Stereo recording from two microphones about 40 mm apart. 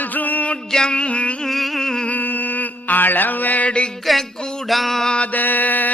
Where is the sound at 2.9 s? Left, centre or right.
Left.